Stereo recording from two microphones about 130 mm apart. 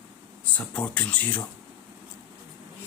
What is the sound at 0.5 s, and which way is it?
Speech, 10° left (ahead or behind).